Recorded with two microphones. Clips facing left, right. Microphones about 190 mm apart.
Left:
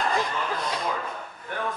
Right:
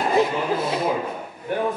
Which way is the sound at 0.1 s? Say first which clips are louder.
Right 8 dB; 20° right (ahead or behind).